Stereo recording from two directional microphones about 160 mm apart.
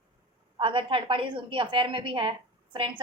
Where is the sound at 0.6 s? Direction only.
35° right (ahead or behind).